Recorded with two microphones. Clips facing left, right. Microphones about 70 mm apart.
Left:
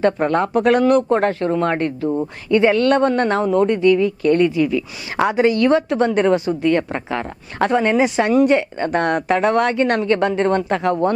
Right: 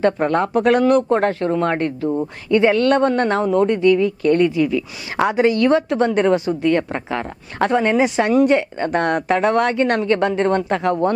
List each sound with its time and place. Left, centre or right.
0.0 s speech: left